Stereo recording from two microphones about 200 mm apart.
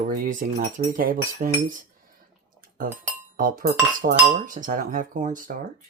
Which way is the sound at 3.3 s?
45° right (ahead or behind).